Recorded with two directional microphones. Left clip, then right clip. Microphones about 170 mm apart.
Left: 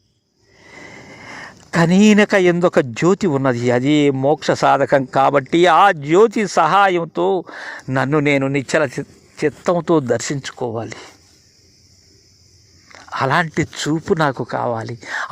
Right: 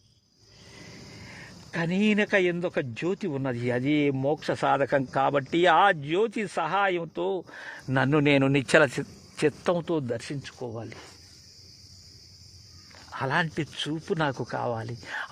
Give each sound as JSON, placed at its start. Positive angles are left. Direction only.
{"t": 1.2, "sound": "speech", "side_deg": 35}
{"t": 8.1, "sound": "speech", "side_deg": 10}
{"t": 9.7, "sound": "speech", "side_deg": 35}
{"t": 12.9, "sound": "speech", "side_deg": 25}